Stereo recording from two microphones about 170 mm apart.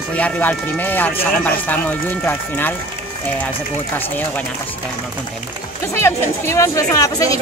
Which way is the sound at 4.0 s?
10° left (ahead or behind).